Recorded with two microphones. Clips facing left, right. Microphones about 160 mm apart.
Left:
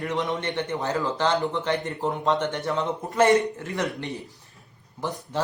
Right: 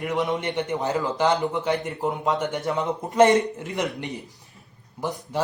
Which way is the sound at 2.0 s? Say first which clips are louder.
Left 1 dB; 5° right (ahead or behind).